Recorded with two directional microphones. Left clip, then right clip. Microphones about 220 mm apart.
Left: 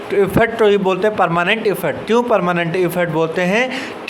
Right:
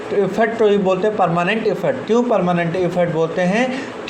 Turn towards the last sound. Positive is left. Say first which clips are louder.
# left 1 dB
turn(degrees=30)  # may be behind; listen again after turning